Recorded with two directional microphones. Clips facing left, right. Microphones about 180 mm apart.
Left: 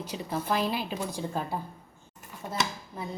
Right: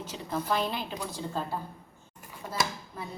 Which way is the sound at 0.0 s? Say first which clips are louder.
Left 1 dB; 10° left (ahead or behind).